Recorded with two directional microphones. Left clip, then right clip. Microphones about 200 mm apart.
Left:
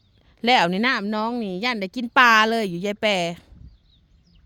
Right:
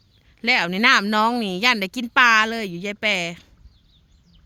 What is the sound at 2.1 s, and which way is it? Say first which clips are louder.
Speech: left 1 dB; 30° left (ahead or behind).